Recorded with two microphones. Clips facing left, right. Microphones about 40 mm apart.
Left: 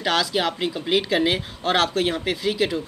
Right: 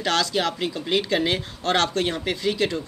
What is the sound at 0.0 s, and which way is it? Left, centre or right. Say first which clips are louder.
Speech: left 1 dB; centre.